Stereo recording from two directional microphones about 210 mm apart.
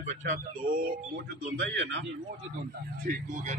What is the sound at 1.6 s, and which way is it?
Speech, 60° right (ahead or behind).